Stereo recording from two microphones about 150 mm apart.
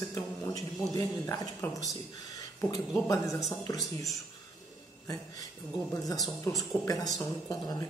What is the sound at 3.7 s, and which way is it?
Speech, centre (ahead or behind).